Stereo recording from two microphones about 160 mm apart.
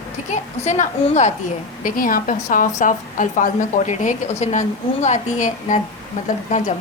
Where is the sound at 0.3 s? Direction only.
50° left (ahead or behind).